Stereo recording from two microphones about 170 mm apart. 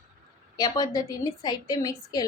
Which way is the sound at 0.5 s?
20° left (ahead or behind).